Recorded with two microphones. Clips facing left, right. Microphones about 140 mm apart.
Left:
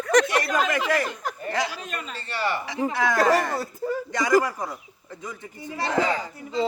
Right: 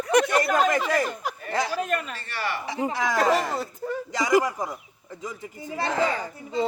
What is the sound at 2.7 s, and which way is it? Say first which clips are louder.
Speech: left 1 dB; 20° right (ahead or behind).